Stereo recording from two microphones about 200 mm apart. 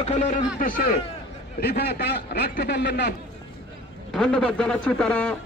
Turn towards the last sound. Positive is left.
turn(degrees=5)  # may be behind; listen again after turning